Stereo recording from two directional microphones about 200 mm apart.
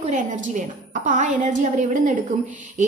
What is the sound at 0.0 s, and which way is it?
A woman's voice, 40° right (ahead or behind).